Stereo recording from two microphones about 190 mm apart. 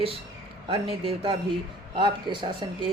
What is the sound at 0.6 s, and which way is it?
Speech, 30° right (ahead or behind).